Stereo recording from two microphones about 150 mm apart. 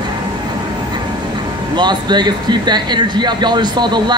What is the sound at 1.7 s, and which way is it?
Speech, 30° right (ahead or behind).